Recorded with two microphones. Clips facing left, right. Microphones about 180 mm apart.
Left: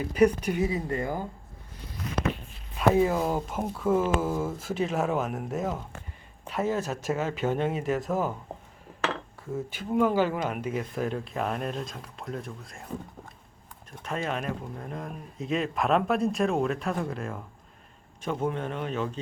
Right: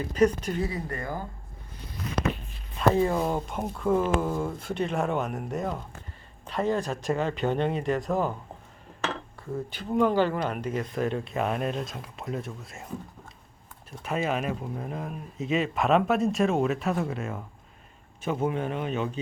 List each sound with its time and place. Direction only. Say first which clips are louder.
0.1 s speech: left 1 dB; 10° left (ahead or behind)
2.7 s speech: even; 5° left (ahead or behind)
9.5 s speech: even; 5° left (ahead or behind)
14.0 s speech: right 3 dB; 5° right (ahead or behind)